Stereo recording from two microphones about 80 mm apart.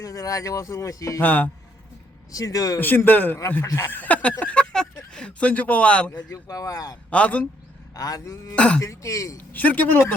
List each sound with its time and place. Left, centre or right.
0.0 s speech: left
1.2 s a man's voice: left
2.3 s speech: left
2.7 s a man's voice: left
6.3 s speech: left
7.1 s a man's voice: centre
7.9 s speech: left
8.5 s a man's voice: centre
8.8 s speech: left
9.5 s a man's voice: left